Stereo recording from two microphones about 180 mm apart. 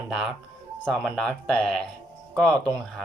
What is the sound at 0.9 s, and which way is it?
Speech, centre (ahead or behind).